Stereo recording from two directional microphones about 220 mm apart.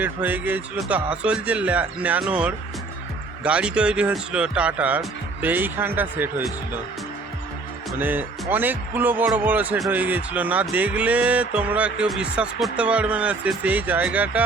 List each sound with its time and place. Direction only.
0.0 s speech: 10° right (ahead or behind)
7.9 s speech: 10° right (ahead or behind)